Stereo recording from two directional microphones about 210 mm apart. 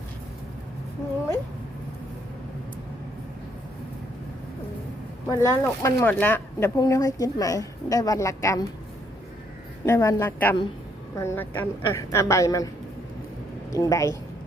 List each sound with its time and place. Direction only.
5.3 s speech: 15° left (ahead or behind)
9.8 s speech: 15° left (ahead or behind)